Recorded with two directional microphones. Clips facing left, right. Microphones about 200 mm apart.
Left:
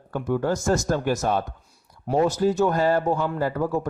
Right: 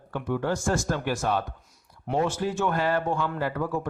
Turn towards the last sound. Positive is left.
turn(degrees=40)  # may be behind; listen again after turning